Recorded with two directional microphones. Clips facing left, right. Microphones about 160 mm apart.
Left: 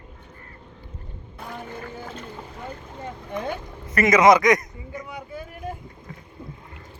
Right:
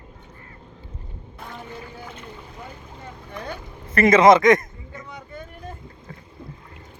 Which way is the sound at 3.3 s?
20° left (ahead or behind).